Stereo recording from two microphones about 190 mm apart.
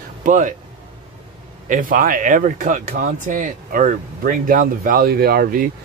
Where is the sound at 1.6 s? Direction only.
45° right (ahead or behind).